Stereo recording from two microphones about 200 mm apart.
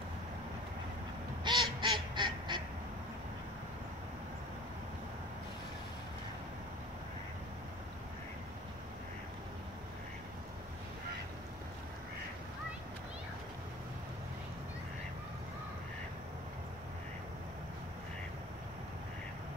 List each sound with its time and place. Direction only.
1.4 s duck: 25° right (ahead or behind)